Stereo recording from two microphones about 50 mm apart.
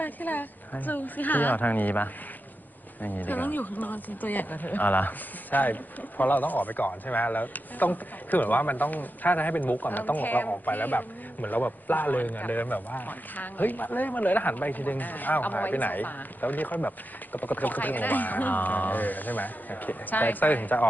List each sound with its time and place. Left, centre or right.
0.0 s speech: left